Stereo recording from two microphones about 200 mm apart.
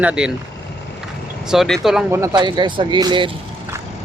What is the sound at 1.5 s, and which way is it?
Speech, centre (ahead or behind).